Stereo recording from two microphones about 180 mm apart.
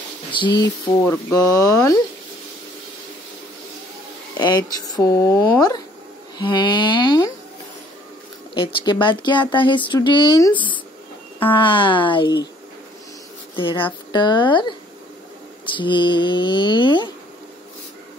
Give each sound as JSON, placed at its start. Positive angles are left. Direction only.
{"t": 0.3, "sound": "speech", "side_deg": 25}
{"t": 4.4, "sound": "speech", "side_deg": 25}
{"t": 9.0, "sound": "speech", "side_deg": 25}
{"t": 11.5, "sound": "speech", "side_deg": 25}
{"t": 13.6, "sound": "speech", "side_deg": 30}